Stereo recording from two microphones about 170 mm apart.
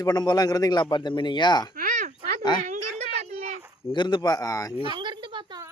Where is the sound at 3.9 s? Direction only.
25° left (ahead or behind).